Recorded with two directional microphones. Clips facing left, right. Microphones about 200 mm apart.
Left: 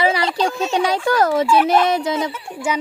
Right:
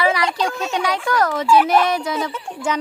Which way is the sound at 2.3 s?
10° left (ahead or behind).